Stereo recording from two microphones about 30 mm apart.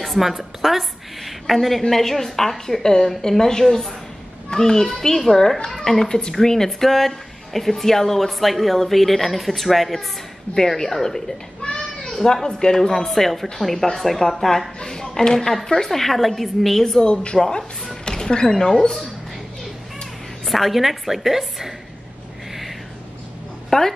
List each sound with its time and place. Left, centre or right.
0.0 s a woman's voice: centre
2.8 s speech: left; by 10.0 s centre
10.7 s speech: centre
11.6 s children playing: left
12.1 s cat: centre
12.4 s speech: left
12.9 s a woman's voice: centre
15.3 s a woman's voice: centre
17.0 s speech: left
20.4 s a woman's voice: centre
23.7 s a woman's voice: left